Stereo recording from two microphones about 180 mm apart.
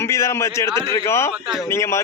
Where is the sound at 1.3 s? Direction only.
Centre (ahead or behind).